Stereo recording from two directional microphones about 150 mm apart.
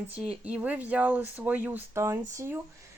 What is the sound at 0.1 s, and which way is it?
Speech, 10° right (ahead or behind).